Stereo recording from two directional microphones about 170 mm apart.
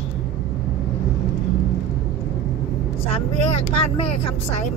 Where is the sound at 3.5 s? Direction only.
35° left (ahead or behind).